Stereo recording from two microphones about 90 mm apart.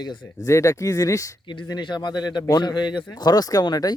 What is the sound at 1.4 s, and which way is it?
A man's voice, 60° left (ahead or behind).